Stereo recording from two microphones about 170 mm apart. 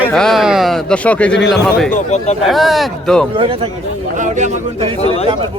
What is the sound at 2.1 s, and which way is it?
Speech, 40° left (ahead or behind).